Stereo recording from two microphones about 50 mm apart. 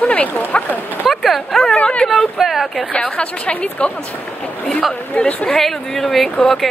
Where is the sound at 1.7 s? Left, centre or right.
Left.